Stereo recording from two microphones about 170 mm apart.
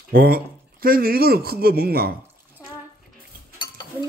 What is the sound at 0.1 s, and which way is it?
Speech, 60° right (ahead or behind).